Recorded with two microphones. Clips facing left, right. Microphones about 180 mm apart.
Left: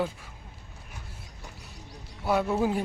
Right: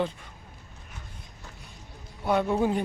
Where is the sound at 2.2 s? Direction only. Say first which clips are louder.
Right 1 dB; 5° left (ahead or behind).